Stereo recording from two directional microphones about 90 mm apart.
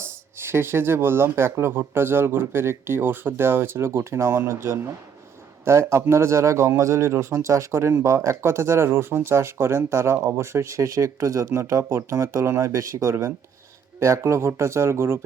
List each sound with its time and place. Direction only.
0.3 s a man's voice: 25° right (ahead or behind)